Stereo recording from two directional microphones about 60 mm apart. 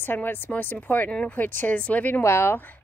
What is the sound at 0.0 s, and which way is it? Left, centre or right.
A woman's voice, left.